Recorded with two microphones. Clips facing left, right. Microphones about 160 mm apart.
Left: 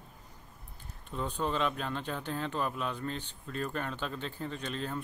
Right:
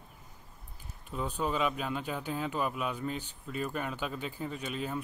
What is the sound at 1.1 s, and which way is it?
Speech, 10° right (ahead or behind).